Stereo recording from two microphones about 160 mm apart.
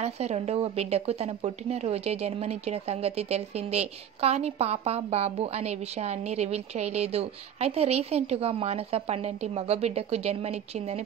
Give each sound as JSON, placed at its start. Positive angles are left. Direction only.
{"t": 0.0, "sound": "a woman's voice", "side_deg": -40}